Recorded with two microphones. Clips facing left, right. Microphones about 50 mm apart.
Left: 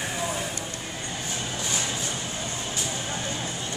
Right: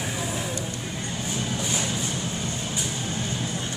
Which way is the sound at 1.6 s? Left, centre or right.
Centre.